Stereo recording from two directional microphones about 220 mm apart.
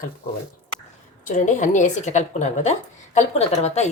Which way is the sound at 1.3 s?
35° left (ahead or behind).